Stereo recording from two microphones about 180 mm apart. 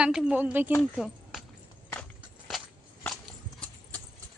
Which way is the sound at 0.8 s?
Centre (ahead or behind).